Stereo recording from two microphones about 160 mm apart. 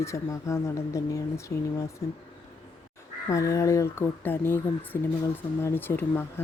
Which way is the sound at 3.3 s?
20° left (ahead or behind).